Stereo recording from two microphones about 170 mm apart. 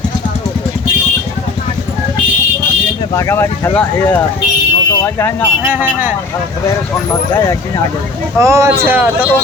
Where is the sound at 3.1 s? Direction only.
15° left (ahead or behind).